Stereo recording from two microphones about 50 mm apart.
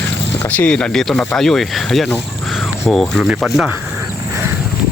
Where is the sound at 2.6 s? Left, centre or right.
Centre.